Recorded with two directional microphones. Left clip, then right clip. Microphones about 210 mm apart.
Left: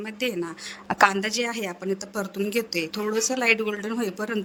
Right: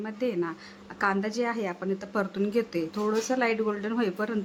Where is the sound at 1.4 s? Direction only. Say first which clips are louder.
Left 1 dB; centre (ahead or behind).